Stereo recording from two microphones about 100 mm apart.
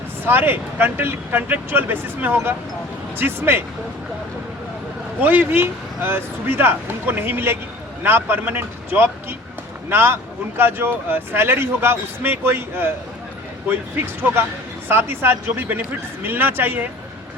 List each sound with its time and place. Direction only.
0.3 s speech: 20° right (ahead or behind)
5.2 s speech: 15° right (ahead or behind)